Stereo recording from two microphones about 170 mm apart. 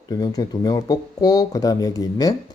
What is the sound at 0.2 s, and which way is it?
Speech, 20° left (ahead or behind).